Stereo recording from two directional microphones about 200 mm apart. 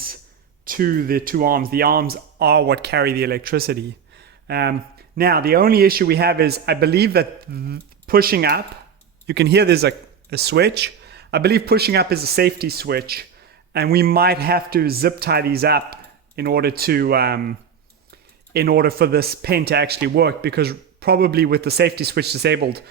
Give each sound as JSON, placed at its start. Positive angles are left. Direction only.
{"t": 0.6, "sound": "a man's voice", "side_deg": -45}
{"t": 18.5, "sound": "a man's voice", "side_deg": -50}